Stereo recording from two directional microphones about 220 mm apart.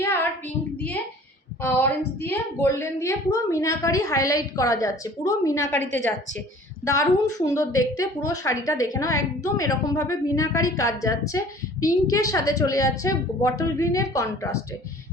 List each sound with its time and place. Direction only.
0.0 s child singing: 10° left (ahead or behind)
1.6 s a woman's voice: 10° left (ahead or behind)
6.8 s a woman's voice: 15° left (ahead or behind)